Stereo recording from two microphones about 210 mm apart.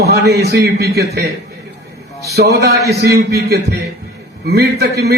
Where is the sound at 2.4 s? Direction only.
50° right (ahead or behind).